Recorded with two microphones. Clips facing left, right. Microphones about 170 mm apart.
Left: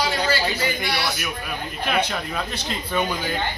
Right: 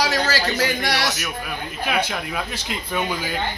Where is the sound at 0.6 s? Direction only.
90° right.